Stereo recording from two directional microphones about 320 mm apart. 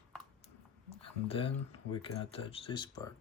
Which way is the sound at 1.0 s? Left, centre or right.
Centre.